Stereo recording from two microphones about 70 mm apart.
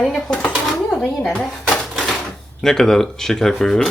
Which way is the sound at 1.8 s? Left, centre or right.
Centre.